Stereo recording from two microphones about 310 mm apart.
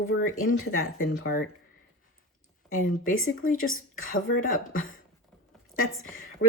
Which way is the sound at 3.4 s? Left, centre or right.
Left.